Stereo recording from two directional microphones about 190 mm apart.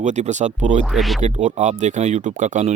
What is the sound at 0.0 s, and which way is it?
Speech, 40° right (ahead or behind).